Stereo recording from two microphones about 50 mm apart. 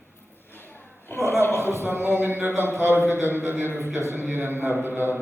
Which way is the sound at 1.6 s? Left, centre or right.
Right.